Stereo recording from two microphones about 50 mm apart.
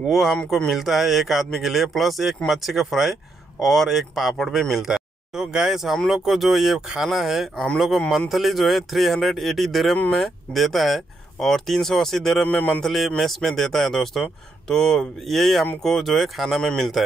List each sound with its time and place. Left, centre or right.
0.0 s speech: centre
7.5 s speech: centre
8.3 s speech: centre
12.4 s a man's voice: left
12.8 s speech: centre